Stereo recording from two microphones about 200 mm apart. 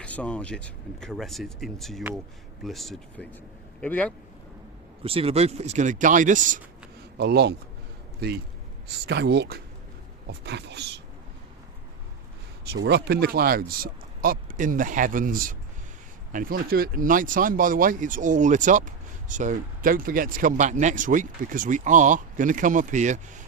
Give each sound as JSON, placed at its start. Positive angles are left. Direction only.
{"t": 0.0, "sound": "a man's voice", "side_deg": 5}
{"t": 5.0, "sound": "speech", "side_deg": -30}
{"t": 7.2, "sound": "speech", "side_deg": -55}
{"t": 12.6, "sound": "speech", "side_deg": -55}